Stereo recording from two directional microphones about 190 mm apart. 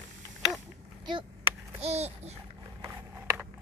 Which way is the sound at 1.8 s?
35° right (ahead or behind).